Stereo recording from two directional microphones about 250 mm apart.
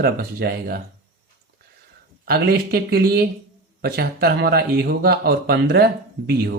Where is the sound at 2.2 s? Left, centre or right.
Right.